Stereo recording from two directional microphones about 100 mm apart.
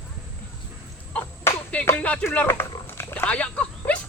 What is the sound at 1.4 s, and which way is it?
Music, 20° left (ahead or behind).